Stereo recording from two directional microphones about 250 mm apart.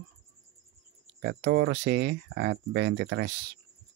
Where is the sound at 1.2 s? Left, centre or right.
Right.